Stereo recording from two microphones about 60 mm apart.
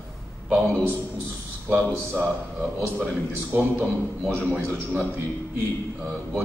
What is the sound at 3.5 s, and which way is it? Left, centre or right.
A man's voice, right.